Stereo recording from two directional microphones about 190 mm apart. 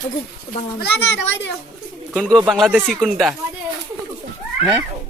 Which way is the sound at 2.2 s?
5° left (ahead or behind).